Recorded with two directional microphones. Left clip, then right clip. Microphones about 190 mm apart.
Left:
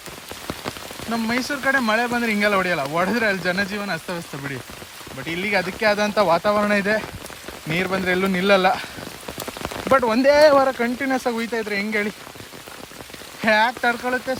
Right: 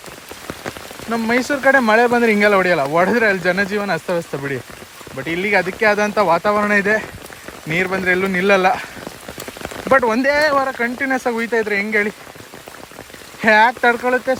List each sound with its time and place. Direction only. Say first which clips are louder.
1.3 s speech: right 7 dB; 10° left (ahead or behind)
9.9 s speech: right 2 dB; 15° left (ahead or behind)
13.4 s speech: right 6 dB; 10° left (ahead or behind)